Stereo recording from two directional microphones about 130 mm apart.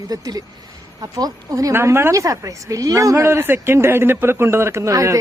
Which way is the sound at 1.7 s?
20° right (ahead or behind).